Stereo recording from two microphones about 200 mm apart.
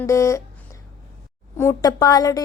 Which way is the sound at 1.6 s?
15° left (ahead or behind).